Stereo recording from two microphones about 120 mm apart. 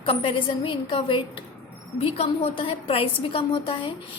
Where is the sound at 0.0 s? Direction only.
50° left (ahead or behind).